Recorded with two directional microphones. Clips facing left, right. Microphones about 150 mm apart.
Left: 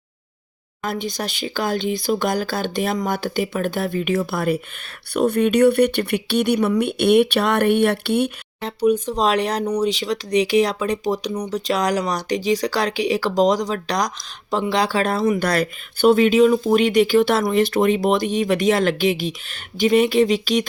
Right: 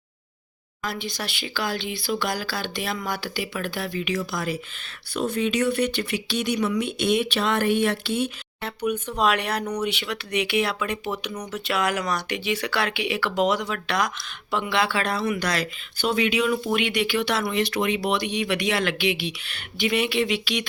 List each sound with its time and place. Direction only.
0.8 s speech: 45° left (ahead or behind)
8.6 s speech: 35° left (ahead or behind)